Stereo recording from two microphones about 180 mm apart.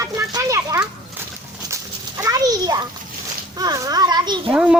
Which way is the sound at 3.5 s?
20° right (ahead or behind).